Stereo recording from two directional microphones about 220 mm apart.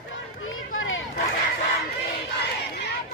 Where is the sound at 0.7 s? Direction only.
65° left (ahead or behind).